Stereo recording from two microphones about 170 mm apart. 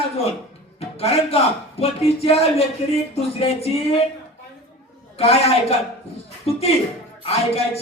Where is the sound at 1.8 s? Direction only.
35° left (ahead or behind).